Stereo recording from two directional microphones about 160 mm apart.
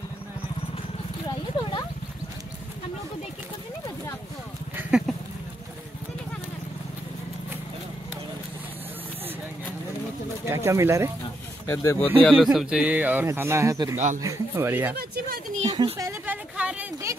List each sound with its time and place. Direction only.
4.7 s a sound: 5° right (ahead or behind)
10.4 s speech: 15° right (ahead or behind)
11.6 s speech: 20° left (ahead or behind)
12.2 s a man's voice: 5° left (ahead or behind)
12.5 s speech: 5° right (ahead or behind)
13.9 s speech: 50° right (ahead or behind)
14.2 s speech: 15° right (ahead or behind)
15.0 s a sound: 65° right (ahead or behind)
15.7 s a sound: 25° right (ahead or behind)